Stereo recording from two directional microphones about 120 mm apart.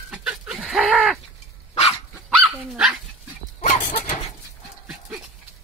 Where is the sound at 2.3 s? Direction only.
5° right (ahead or behind).